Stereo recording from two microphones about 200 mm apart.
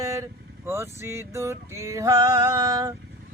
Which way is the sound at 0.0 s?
15° right (ahead or behind).